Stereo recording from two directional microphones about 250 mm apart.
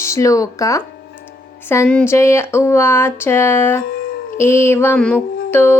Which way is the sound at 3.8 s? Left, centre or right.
Left.